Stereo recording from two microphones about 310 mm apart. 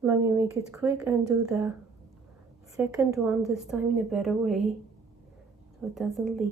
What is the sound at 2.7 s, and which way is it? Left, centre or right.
A woman's voice, centre.